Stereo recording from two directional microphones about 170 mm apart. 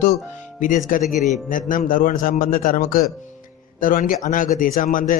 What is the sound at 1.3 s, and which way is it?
Speech, 50° left (ahead or behind).